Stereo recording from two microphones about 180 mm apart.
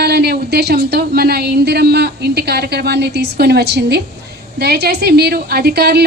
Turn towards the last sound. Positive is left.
turn(degrees=-60)  # may be behind; listen again after turning